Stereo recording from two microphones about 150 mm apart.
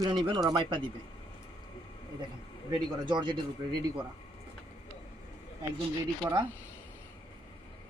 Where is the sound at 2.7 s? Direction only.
30° right (ahead or behind).